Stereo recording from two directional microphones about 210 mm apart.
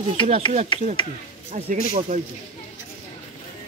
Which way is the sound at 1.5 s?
35° right (ahead or behind).